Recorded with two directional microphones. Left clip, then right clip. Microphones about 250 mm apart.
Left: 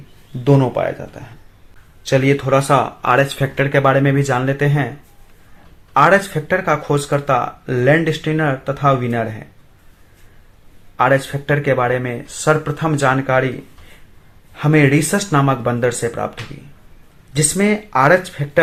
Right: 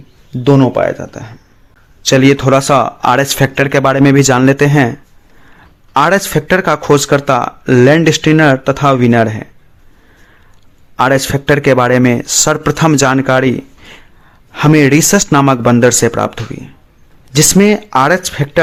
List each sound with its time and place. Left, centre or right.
0.4 s speech: right
5.9 s speech: right
10.9 s speech: right